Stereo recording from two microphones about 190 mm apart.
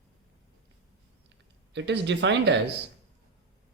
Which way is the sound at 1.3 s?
65° right (ahead or behind).